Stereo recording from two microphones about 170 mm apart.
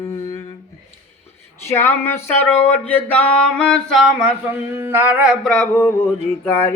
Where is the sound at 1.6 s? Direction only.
15° left (ahead or behind); by 5.5 s 5° right (ahead or behind).